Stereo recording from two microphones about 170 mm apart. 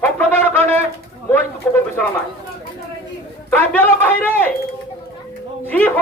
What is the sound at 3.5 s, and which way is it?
A man's voice, 10° left (ahead or behind).